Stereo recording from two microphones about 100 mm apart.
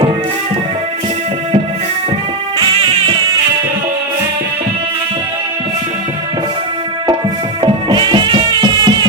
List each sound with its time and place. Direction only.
7.6 s music: 50° right (ahead or behind)